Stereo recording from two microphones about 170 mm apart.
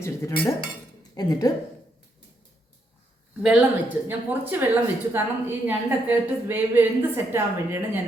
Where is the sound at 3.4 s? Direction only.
5° right (ahead or behind).